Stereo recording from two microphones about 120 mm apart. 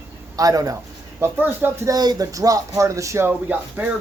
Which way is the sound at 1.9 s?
35° right (ahead or behind).